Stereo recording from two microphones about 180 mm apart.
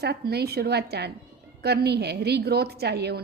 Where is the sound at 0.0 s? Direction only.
65° right (ahead or behind).